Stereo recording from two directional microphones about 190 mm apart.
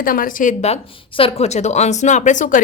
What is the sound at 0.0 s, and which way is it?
A woman's voice, 50° left (ahead or behind).